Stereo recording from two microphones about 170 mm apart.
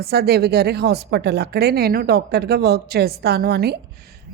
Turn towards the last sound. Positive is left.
turn(degrees=-65)  # may be behind; listen again after turning